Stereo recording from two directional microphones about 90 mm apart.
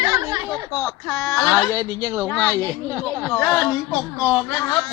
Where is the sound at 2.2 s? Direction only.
20° left (ahead or behind).